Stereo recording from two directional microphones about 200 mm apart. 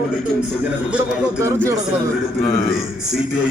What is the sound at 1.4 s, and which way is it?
Speech, 15° right (ahead or behind).